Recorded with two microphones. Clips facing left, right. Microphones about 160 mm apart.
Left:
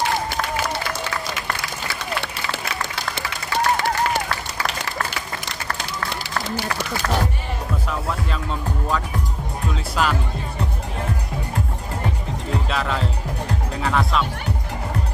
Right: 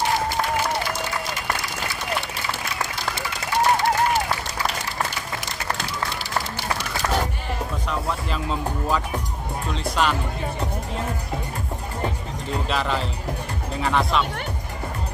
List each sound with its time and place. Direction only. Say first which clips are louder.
7.9 s speech: right 1 dB; centre (ahead or behind)
12.6 s speech: right 2 dB; centre (ahead or behind)